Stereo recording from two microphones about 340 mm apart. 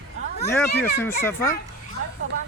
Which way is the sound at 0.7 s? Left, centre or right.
Left.